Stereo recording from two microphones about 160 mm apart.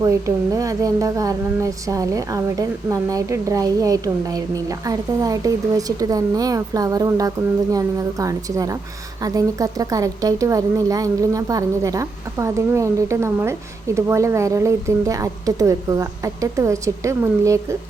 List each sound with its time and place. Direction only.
0.0 s speech: 20° right (ahead or behind)